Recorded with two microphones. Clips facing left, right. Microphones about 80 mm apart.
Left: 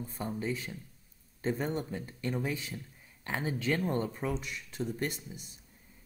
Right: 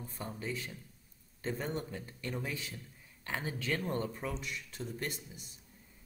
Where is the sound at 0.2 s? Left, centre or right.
Left.